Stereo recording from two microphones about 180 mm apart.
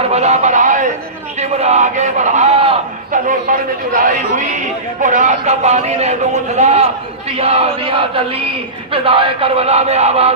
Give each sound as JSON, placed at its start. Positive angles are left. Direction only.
{"t": 0.1, "sound": "speech", "side_deg": -40}
{"t": 3.1, "sound": "a man's voice", "side_deg": -45}